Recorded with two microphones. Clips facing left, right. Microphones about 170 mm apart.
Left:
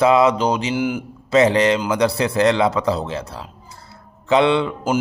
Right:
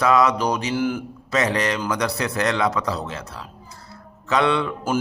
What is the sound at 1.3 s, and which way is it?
Speech, 25° left (ahead or behind).